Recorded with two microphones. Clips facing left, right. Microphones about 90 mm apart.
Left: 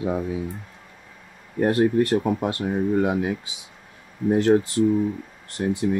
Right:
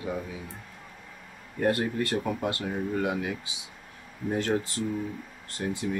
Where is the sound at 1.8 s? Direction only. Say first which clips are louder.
Left 9 dB; 20° left (ahead or behind).